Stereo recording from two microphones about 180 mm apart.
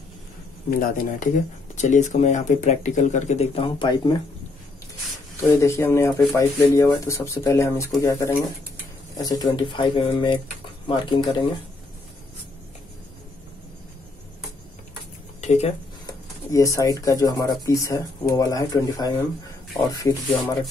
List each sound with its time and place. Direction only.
0.7 s speech: 50° left (ahead or behind); by 4.2 s 25° left (ahead or behind)
5.5 s speech: 15° left (ahead or behind)
15.4 s speech: 35° left (ahead or behind)
16.1 s a sound: 20° left (ahead or behind)
17.0 s speech: 20° left (ahead or behind)